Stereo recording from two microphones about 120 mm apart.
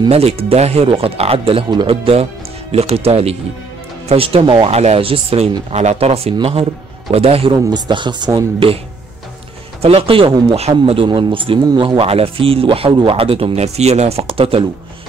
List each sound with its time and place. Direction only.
0.1 s speech: 55° right (ahead or behind)
5.7 s speech: 65° right (ahead or behind)
7.7 s speech: 40° right (ahead or behind)
9.8 s speech: 55° right (ahead or behind)
10.9 s speech: 45° right (ahead or behind)
11.6 s speech: 35° right (ahead or behind); by 14.6 s 50° right (ahead or behind)